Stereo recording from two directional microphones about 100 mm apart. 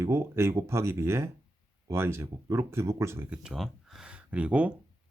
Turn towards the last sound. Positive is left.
turn(degrees=-15)  # may be behind; listen again after turning